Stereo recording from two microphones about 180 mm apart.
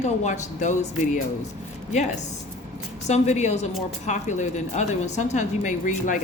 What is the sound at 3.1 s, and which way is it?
A woman's voice, 40° left (ahead or behind).